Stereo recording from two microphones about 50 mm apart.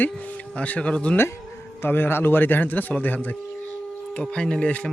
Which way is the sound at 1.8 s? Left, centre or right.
Left.